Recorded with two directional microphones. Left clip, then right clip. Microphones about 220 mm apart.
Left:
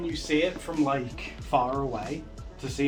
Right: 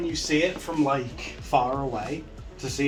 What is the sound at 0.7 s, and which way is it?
Speech, 25° left (ahead or behind).